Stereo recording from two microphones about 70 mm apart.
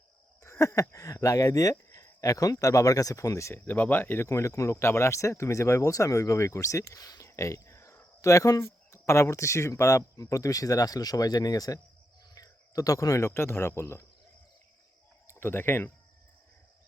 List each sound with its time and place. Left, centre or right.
0.4 s speech: left
3.5 s speech: left
4.3 s speech: left
7.3 s a sound: left
9.0 s speech: left
15.3 s speech: left